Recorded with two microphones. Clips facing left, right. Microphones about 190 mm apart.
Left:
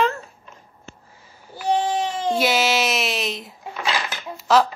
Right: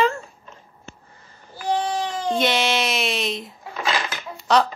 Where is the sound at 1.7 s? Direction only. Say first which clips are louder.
Left 2 dB; 20° left (ahead or behind).